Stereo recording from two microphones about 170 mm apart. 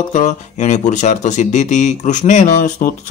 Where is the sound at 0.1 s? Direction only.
45° left (ahead or behind).